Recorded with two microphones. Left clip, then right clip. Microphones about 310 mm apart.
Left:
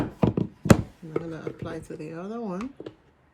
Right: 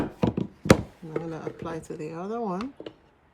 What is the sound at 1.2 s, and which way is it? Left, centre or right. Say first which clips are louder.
Speech: right 1 dB; centre.